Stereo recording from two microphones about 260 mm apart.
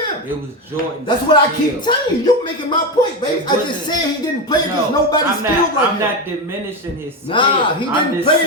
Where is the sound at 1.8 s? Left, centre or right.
Centre.